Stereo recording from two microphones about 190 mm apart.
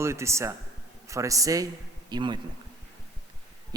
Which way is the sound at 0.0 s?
15° right (ahead or behind).